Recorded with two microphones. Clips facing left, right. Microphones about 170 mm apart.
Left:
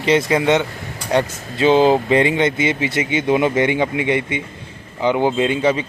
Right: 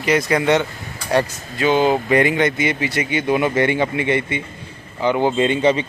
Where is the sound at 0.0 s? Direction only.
25° left (ahead or behind).